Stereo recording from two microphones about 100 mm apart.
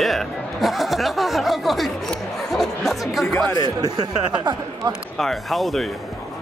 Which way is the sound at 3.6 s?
50° right (ahead or behind).